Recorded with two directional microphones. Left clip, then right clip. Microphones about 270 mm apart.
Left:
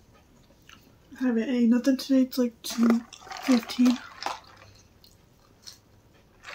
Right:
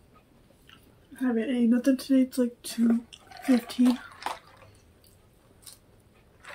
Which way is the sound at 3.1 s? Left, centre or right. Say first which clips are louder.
Left 1 dB; left.